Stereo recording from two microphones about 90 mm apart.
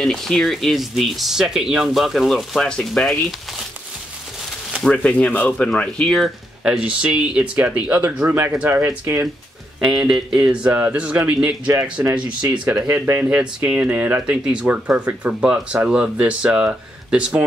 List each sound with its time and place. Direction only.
0.0 s speech: 5° left (ahead or behind)
4.8 s speech: 10° left (ahead or behind); by 9.2 s 25° right (ahead or behind)
9.8 s speech: 5° right (ahead or behind)
12.8 s speech: 25° right (ahead or behind)
13.2 s speech: 15° right (ahead or behind)